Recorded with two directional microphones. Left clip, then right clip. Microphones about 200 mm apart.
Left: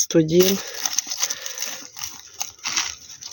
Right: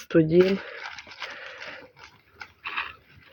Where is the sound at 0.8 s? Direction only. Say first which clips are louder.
Left 11 dB; 50° left (ahead or behind).